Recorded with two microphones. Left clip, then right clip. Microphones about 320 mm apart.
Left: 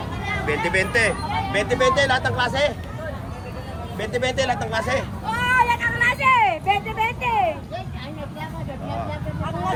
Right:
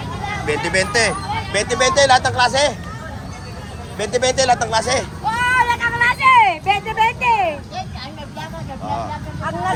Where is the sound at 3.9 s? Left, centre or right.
Centre.